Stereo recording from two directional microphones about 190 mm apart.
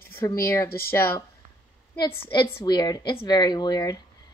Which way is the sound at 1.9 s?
25° left (ahead or behind).